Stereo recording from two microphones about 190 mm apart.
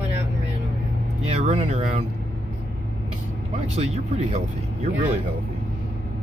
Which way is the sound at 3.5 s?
35° right (ahead or behind).